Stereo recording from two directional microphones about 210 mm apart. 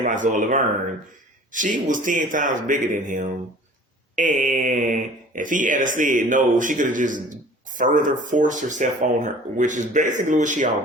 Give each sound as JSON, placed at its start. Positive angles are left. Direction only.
{"t": 0.0, "sound": "speech", "side_deg": -40}